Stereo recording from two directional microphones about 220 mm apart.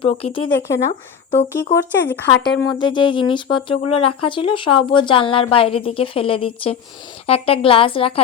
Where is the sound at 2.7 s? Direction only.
20° left (ahead or behind).